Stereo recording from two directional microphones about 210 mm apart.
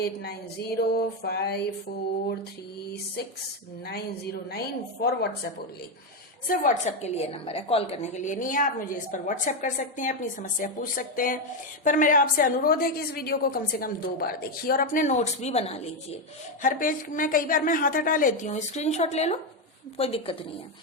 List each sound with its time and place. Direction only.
0.0 s a woman's voice: 50° left (ahead or behind)
4.5 s a woman's voice: 50° left (ahead or behind)
6.5 s a woman's voice: 35° left (ahead or behind)